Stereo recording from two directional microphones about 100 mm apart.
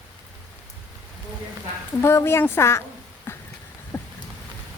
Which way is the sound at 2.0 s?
25° left (ahead or behind).